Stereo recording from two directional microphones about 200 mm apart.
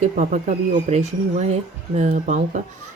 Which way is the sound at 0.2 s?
40° right (ahead or behind).